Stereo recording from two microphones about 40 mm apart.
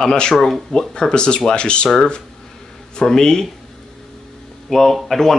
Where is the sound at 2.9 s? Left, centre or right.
Centre.